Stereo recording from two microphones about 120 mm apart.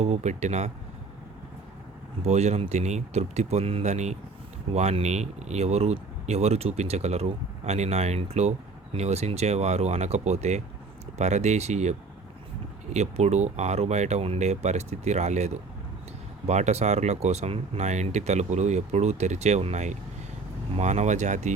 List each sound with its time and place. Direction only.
0.0 s speech: 70° right (ahead or behind)
2.2 s speech: 65° right (ahead or behind); by 21.5 s 80° right